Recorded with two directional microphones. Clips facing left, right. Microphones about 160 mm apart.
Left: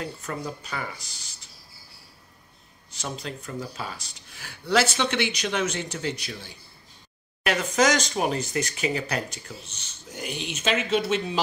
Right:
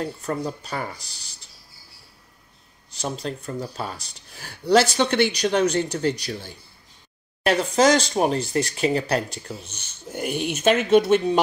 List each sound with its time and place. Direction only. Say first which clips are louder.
0.0 s speech: right 5 dB; 35° right (ahead or behind)
2.9 s speech: right 5 dB; 35° right (ahead or behind)
7.4 s speech: right 4 dB; 30° right (ahead or behind)
10.1 s speech: right 8 dB; 55° right (ahead or behind)